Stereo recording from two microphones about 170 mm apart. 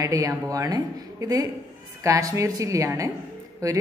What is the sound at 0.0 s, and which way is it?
A woman's voice, 20° right (ahead or behind).